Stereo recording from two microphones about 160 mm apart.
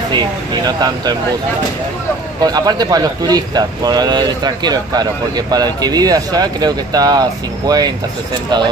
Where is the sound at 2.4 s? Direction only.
25° right (ahead or behind).